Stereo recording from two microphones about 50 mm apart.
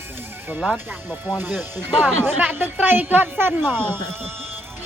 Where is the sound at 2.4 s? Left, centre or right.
Right.